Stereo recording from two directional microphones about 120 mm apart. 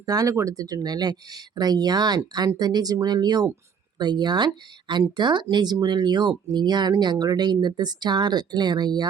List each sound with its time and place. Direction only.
0.0 s speech: 30° right (ahead or behind)